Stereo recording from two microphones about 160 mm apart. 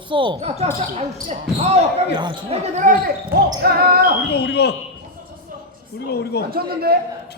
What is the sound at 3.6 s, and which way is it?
Speech, 75° right (ahead or behind).